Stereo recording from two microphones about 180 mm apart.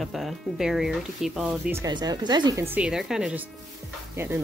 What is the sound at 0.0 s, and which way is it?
Speech, centre (ahead or behind).